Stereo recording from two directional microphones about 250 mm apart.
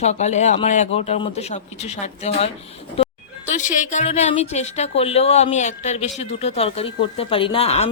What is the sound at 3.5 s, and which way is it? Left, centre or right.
Speech, left.